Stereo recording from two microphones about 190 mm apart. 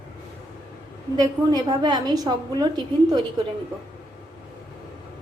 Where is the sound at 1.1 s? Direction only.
20° right (ahead or behind).